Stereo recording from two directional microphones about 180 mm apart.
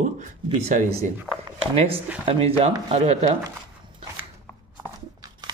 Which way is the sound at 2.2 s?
35° right (ahead or behind).